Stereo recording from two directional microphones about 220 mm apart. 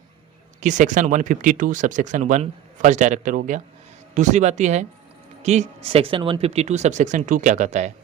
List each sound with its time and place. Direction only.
0.6 s speech: 35° right (ahead or behind)